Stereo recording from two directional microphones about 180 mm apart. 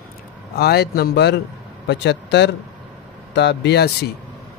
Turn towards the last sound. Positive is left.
turn(degrees=70)  # may be behind; listen again after turning